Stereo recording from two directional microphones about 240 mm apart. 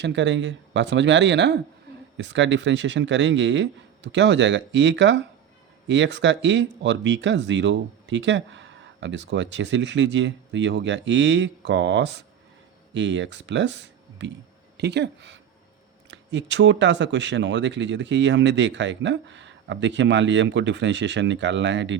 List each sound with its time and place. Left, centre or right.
0.0 s speech: right